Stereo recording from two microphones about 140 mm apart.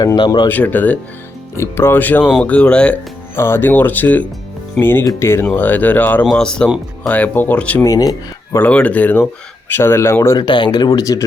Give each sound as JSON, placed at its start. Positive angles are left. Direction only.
{"t": 0.0, "sound": "speech", "side_deg": 25}
{"t": 0.4, "sound": "speech", "side_deg": 15}
{"t": 7.9, "sound": "speech", "side_deg": 25}
{"t": 8.5, "sound": "speech", "side_deg": 10}
{"t": 10.3, "sound": "speech", "side_deg": 35}